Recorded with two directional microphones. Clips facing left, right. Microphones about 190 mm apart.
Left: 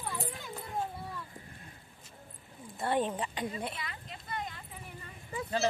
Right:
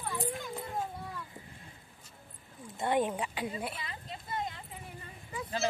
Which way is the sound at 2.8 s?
10° right (ahead or behind).